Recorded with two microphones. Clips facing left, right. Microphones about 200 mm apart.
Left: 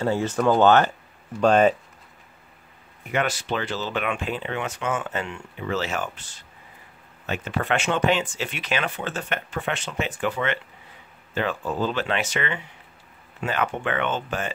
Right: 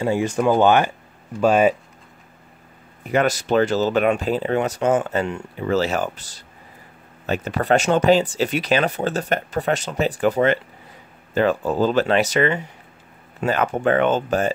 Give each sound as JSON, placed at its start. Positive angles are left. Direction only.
{"t": 0.0, "sound": "speech", "side_deg": -15}
{"t": 3.1, "sound": "speech", "side_deg": -40}